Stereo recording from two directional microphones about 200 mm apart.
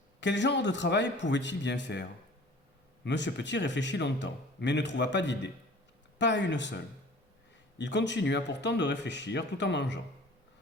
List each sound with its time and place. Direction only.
0.2 s speech: 60° left (ahead or behind)